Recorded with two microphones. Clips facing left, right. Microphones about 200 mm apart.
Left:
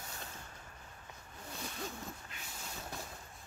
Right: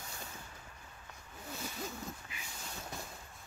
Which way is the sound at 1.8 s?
5° right (ahead or behind).